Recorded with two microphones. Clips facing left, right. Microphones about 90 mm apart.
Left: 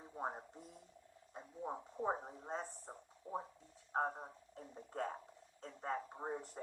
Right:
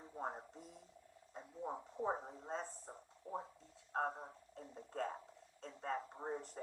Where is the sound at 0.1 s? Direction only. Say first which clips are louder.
Left 1 dB; 10° left (ahead or behind).